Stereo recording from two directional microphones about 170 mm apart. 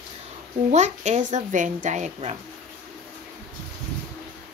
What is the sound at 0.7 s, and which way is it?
A woman's voice, 45° right (ahead or behind).